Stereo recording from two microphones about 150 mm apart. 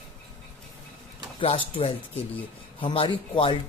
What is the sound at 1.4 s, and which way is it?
Speech, 35° left (ahead or behind).